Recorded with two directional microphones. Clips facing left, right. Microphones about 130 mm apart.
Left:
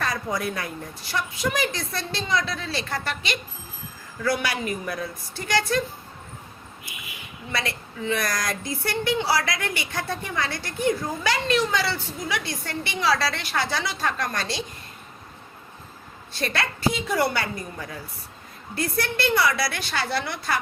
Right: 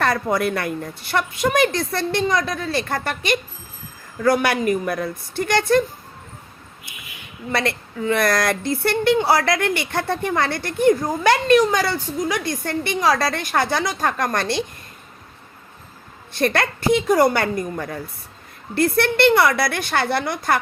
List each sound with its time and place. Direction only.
0.0 s a woman's voice: 60° right (ahead or behind)
7.5 s a woman's voice: 55° right (ahead or behind)
16.3 s a woman's voice: 50° right (ahead or behind)
18.7 s speech: 65° right (ahead or behind); by 20.6 s 50° right (ahead or behind)